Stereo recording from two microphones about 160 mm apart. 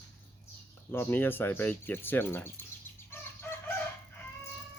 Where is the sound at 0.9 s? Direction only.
15° left (ahead or behind).